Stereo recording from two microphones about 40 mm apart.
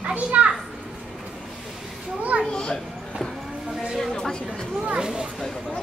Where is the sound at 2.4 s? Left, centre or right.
Centre.